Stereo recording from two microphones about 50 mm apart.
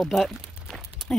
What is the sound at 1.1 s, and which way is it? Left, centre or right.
Speech, centre.